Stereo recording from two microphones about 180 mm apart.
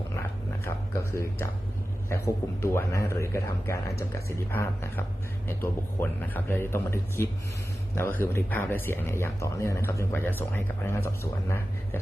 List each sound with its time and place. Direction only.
1.1 s speech: 15° left (ahead or behind)